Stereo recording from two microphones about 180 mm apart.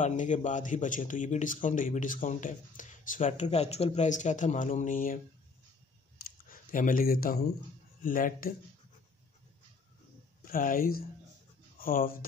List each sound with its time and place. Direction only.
0.0 s speech: 45° left (ahead or behind)
6.5 s speech: 50° left (ahead or behind)
10.4 s speech: 50° left (ahead or behind)